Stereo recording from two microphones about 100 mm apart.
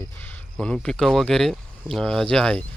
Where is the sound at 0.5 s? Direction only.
5° left (ahead or behind).